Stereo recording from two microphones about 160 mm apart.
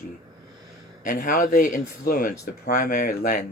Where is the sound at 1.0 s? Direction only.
55° left (ahead or behind).